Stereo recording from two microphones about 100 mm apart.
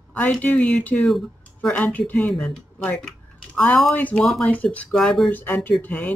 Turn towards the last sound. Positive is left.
turn(degrees=15)  # may be behind; listen again after turning